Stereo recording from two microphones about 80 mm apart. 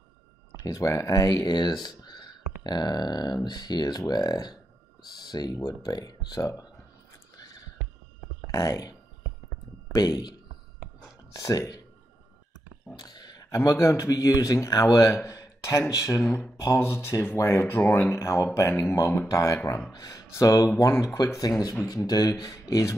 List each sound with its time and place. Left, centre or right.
0.7 s speech: left
2.0 s a sound: left
3.4 s speech: left
7.3 s a sound: left
8.5 s speech: left
9.9 s speech: left
11.3 s speech: left
12.9 s a sound: left
13.4 s speech: left